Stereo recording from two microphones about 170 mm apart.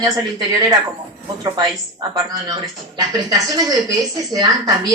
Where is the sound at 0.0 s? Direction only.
20° right (ahead or behind).